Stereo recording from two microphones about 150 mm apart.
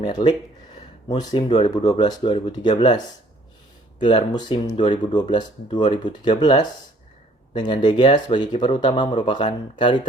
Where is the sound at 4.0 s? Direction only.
30° left (ahead or behind).